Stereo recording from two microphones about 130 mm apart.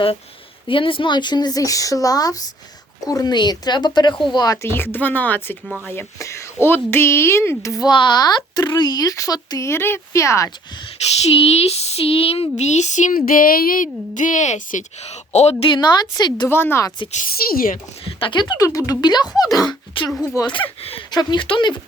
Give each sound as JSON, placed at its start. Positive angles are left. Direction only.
{"t": 0.7, "sound": "speech", "side_deg": 40}
{"t": 5.6, "sound": "speech", "side_deg": 0}
{"t": 5.9, "sound": "speech", "side_deg": 20}
{"t": 11.4, "sound": "speech", "side_deg": 50}
{"t": 15.7, "sound": "speech", "side_deg": 35}
{"t": 16.5, "sound": "speech", "side_deg": 15}
{"t": 17.1, "sound": "a woman's voice", "side_deg": 80}
{"t": 18.0, "sound": "speech", "side_deg": 40}
{"t": 20.1, "sound": "speech", "side_deg": 5}
{"t": 20.3, "sound": "speech", "side_deg": 35}
{"t": 21.1, "sound": "speech", "side_deg": 35}